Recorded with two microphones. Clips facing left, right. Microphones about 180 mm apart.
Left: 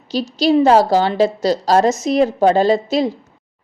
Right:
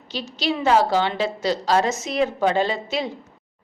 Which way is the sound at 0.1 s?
40° left (ahead or behind).